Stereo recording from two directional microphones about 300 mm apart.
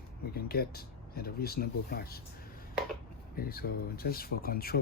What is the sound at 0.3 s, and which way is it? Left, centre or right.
Speech, left.